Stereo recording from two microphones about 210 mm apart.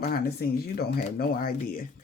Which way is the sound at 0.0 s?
45° left (ahead or behind).